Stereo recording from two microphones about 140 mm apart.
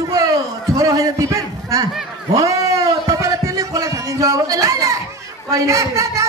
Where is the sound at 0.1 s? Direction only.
25° right (ahead or behind).